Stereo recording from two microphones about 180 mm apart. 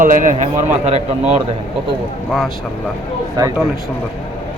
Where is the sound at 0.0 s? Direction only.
45° right (ahead or behind).